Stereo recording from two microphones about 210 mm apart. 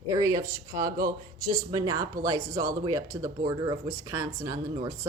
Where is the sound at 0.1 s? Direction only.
15° right (ahead or behind).